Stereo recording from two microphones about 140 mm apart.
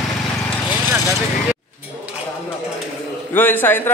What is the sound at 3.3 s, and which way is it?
Speech, 15° left (ahead or behind).